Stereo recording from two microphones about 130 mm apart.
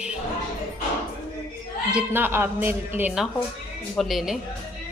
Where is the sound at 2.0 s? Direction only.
15° right (ahead or behind).